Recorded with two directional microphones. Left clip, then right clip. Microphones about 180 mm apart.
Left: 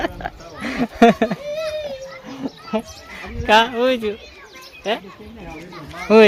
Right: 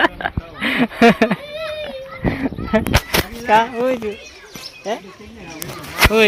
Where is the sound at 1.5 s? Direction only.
50° right (ahead or behind).